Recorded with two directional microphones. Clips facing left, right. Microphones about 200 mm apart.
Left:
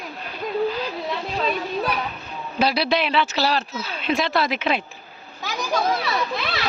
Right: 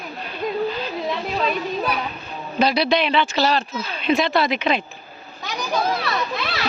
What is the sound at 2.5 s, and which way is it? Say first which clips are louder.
Speech: right 2 dB; 5° left (ahead or behind).